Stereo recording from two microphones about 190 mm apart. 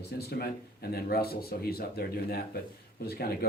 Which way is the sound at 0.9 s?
55° left (ahead or behind).